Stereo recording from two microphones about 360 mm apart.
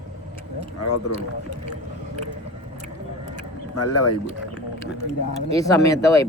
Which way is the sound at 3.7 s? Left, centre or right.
Left.